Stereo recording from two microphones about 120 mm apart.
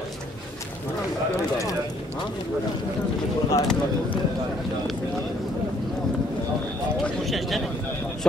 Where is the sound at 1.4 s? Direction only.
25° left (ahead or behind).